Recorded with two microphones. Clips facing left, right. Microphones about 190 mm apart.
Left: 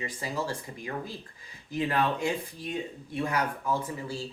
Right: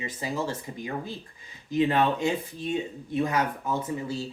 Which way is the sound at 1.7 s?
25° right (ahead or behind).